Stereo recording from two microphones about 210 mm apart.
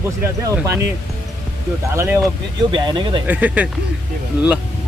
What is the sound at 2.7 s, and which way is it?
Speech, 20° right (ahead or behind).